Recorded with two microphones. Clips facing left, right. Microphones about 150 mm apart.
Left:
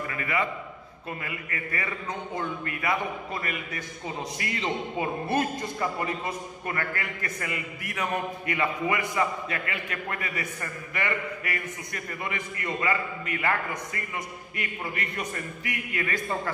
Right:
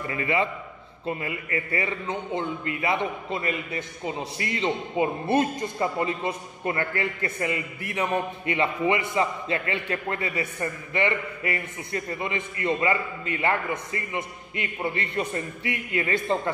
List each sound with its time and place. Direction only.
0.1 s a man's voice: 25° right (ahead or behind)